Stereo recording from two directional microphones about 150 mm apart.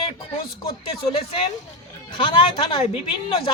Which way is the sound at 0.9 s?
35° left (ahead or behind).